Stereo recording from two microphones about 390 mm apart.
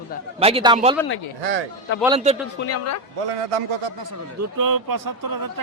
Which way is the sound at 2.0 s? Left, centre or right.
Centre.